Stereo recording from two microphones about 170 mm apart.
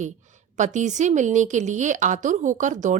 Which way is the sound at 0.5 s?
45° right (ahead or behind).